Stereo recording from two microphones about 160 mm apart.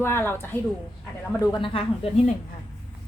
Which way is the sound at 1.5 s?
30° left (ahead or behind).